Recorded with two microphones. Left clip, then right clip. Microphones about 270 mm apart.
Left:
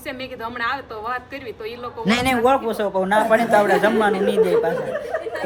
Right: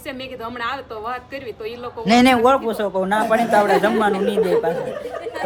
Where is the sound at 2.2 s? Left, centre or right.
Right.